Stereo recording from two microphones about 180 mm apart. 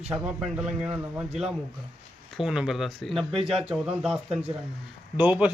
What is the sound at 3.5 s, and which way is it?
A man's voice, 5° right (ahead or behind).